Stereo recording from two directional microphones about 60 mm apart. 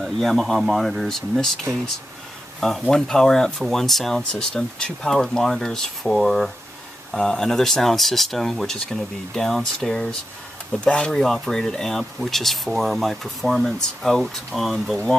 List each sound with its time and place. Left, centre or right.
0.0 s speech: centre
1.7 s speech: right
2.6 s speech: centre